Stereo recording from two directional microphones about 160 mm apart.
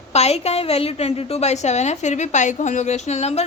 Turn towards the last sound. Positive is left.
turn(degrees=40)  # may be behind; listen again after turning